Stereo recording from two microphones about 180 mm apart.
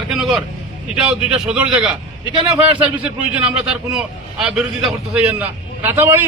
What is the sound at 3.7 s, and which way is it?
A man's voice, 5° right (ahead or behind).